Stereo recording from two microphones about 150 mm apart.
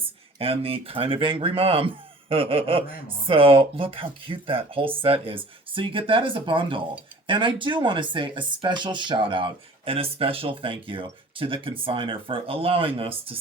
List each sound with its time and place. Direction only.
0.0 s speech: 40° right (ahead or behind)